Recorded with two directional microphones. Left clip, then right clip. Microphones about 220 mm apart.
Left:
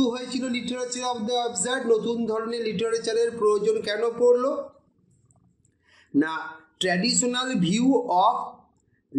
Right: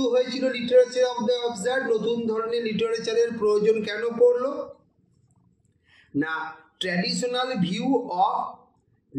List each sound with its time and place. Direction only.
0.0 s a man's voice: 50° left (ahead or behind)
5.9 s a man's voice: 50° left (ahead or behind)